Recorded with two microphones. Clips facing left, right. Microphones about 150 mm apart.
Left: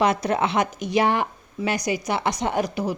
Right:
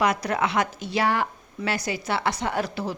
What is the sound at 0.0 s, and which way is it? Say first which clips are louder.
Speech: left 3 dB; 25° left (ahead or behind).